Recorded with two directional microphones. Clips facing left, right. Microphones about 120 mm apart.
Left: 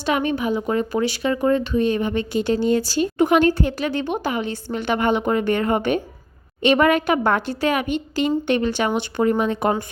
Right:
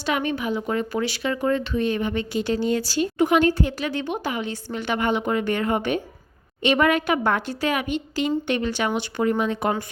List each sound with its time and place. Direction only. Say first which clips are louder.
0.0 s a woman's voice: left 3 dB; 45° left (ahead or behind)
0.7 s speech: left 4 dB; 30° left (ahead or behind)
2.0 s a woman's voice: left 3 dB; 45° left (ahead or behind)